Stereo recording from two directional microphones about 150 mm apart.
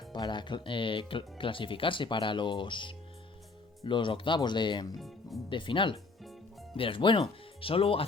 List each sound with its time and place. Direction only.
0.1 s speech: 30° left (ahead or behind)
4.9 s speech: centre (ahead or behind)
5.5 s speech: 35° left (ahead or behind)